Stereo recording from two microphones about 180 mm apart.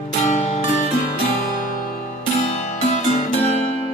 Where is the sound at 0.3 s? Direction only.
40° left (ahead or behind).